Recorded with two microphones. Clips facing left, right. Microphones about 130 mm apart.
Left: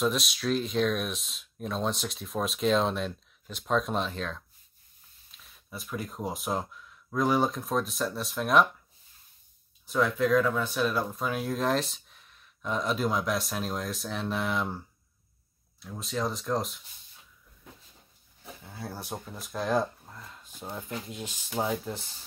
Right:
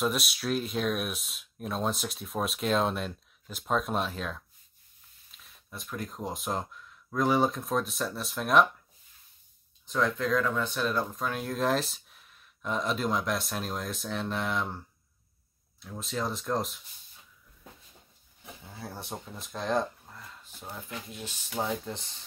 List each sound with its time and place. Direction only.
0.0 s speech: 5° right (ahead or behind)
9.8 s speech: 5° left (ahead or behind)
15.8 s speech: centre (ahead or behind)
18.8 s speech: centre (ahead or behind)